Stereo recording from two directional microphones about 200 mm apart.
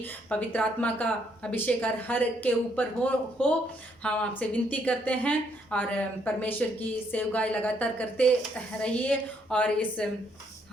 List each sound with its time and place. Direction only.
0.0 s a woman's voice: 10° left (ahead or behind)